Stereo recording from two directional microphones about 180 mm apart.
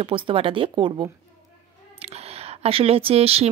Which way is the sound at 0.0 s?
30° right (ahead or behind).